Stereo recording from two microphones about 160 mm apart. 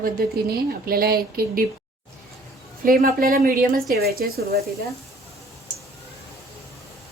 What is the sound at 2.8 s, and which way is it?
Speech, 65° right (ahead or behind).